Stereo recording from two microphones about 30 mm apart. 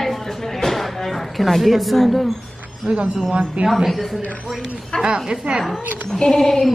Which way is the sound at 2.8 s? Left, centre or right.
Right.